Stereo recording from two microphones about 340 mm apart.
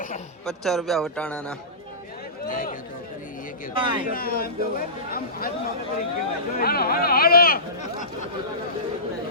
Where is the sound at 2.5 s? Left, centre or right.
Left.